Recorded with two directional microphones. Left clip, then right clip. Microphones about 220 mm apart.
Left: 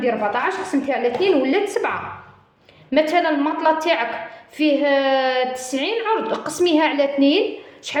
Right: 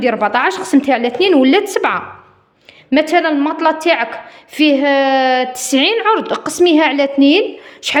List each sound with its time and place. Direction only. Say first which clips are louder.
0.0 s a woman's voice: right 6 dB; 50° right (ahead or behind)